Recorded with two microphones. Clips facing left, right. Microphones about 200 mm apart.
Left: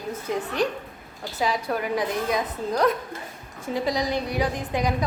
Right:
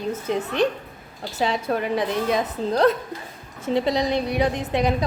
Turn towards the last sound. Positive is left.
turn(degrees=-25)  # may be behind; listen again after turning